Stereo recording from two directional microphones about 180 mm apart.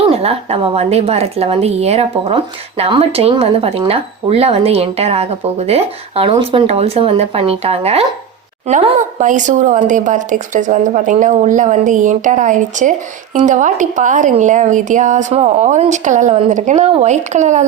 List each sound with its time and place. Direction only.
0.2 s a woman's voice: 35° right (ahead or behind)